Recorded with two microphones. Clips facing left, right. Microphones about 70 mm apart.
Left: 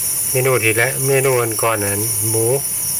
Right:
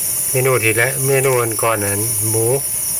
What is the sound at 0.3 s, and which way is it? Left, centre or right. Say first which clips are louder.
Speech: even; centre.